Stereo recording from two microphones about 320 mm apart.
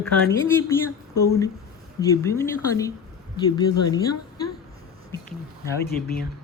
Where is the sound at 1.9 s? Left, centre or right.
Centre.